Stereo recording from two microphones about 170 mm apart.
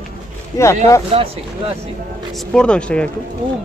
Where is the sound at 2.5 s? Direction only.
5° left (ahead or behind).